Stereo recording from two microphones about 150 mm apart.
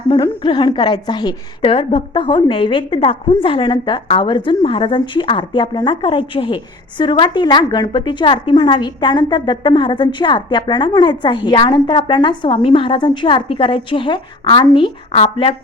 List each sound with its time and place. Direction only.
0.1 s a woman's voice: 30° left (ahead or behind)